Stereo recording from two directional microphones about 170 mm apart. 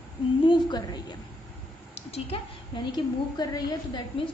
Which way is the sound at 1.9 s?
40° left (ahead or behind).